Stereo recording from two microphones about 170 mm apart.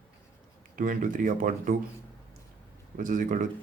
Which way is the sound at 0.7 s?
50° right (ahead or behind).